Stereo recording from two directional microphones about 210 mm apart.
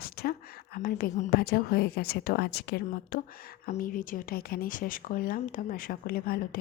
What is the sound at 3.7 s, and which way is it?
A woman's voice, 40° left (ahead or behind).